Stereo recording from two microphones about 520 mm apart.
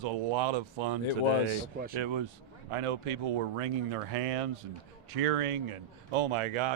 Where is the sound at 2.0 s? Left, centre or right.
Right.